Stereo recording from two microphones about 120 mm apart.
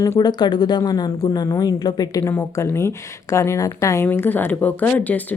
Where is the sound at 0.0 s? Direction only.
30° left (ahead or behind).